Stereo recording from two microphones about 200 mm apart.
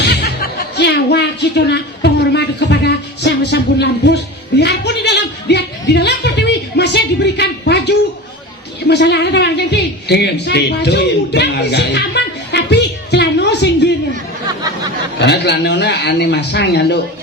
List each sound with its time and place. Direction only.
0.0 s music: 55° left (ahead or behind)
8.9 s speech: 60° left (ahead or behind)
15.2 s speech: 60° left (ahead or behind)